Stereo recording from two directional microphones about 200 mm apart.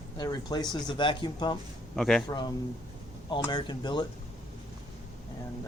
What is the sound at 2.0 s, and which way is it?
Speech, centre (ahead or behind).